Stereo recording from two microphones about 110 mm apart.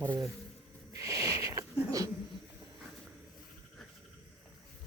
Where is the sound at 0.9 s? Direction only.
30° right (ahead or behind).